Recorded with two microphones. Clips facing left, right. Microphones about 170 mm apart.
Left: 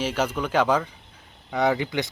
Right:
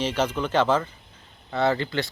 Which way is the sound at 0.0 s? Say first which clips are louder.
Even; 10° left (ahead or behind).